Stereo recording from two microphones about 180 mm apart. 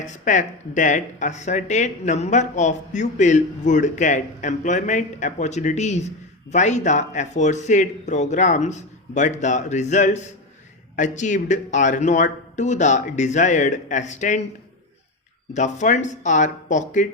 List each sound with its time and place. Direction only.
0.0 s speech: 45° left (ahead or behind)
15.5 s speech: 40° left (ahead or behind)